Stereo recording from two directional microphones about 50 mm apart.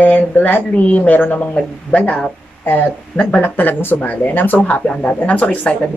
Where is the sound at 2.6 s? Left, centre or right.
Left.